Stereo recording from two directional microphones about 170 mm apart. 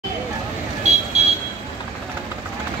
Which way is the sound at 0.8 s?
40° right (ahead or behind).